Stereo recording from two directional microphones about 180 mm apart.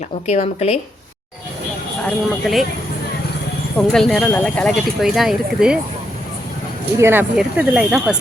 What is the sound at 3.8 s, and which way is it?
Speech, centre (ahead or behind).